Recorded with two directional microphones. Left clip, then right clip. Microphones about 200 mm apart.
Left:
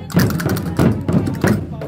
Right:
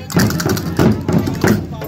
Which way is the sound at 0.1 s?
30° left (ahead or behind).